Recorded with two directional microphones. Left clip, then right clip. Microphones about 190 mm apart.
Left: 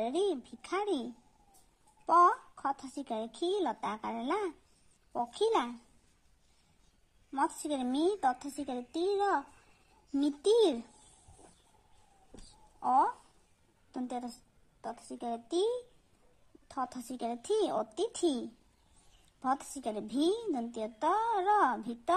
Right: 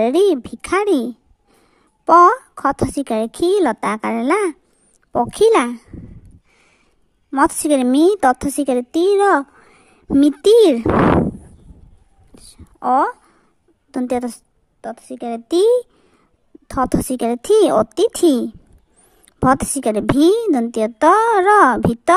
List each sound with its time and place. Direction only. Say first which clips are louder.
0.0 s a woman's voice: right 18 dB; 35° right (ahead or behind)
7.2 s a woman's voice: right 18 dB; 40° right (ahead or behind)
12.8 s a woman's voice: right 12 dB; 45° right (ahead or behind)